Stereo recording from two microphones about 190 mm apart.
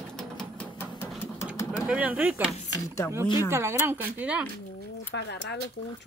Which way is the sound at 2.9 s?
15° left (ahead or behind).